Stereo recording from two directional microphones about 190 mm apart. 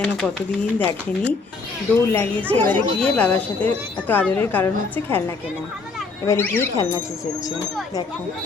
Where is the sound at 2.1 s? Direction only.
5° left (ahead or behind).